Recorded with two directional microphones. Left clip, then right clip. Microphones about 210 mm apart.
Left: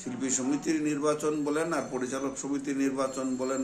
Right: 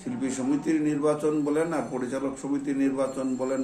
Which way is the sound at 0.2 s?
15° left (ahead or behind).